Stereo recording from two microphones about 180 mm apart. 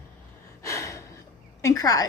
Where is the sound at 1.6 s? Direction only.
20° left (ahead or behind).